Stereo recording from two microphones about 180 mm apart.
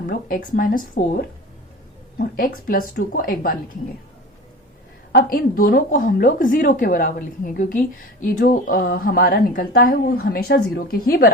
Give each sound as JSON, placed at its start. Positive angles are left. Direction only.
{"t": 0.1, "sound": "a woman's voice", "side_deg": 50}
{"t": 5.1, "sound": "a woman's voice", "side_deg": 55}